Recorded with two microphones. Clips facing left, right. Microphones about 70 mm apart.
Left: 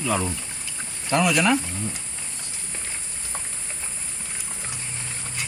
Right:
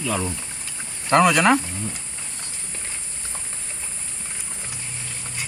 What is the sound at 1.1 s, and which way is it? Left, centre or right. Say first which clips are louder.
Speech: right 4 dB; right.